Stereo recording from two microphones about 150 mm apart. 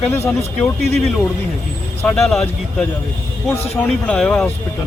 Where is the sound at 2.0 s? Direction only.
5° left (ahead or behind).